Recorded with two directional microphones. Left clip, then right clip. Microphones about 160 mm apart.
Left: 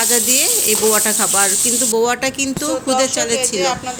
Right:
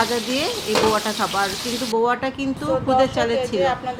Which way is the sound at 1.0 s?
20° left (ahead or behind).